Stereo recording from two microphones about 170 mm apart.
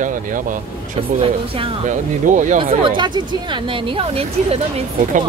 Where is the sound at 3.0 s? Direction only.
25° right (ahead or behind).